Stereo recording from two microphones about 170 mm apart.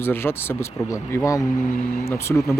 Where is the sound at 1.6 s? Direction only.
50° left (ahead or behind).